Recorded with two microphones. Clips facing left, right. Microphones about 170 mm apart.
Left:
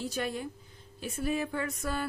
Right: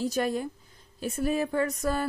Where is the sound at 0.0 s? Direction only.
40° right (ahead or behind).